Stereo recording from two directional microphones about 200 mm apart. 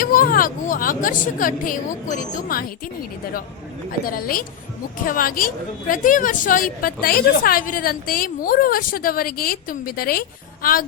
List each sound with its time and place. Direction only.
0.0 s a woman's voice: 45° left (ahead or behind)
4.0 s a woman's voice: 45° left (ahead or behind)